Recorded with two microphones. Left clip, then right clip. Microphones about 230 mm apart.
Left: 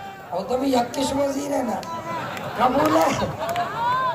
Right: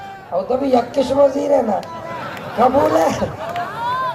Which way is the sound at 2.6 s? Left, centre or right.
Centre.